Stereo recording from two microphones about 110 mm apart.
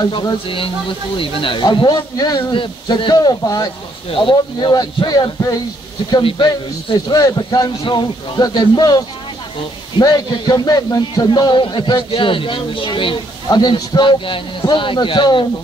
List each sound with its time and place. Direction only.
0.0 s a man's voice: 35° left (ahead or behind)
1.1 s a man's voice: 50° left (ahead or behind); by 5.6 s 35° left (ahead or behind)
6.2 s a man's voice: 50° left (ahead or behind)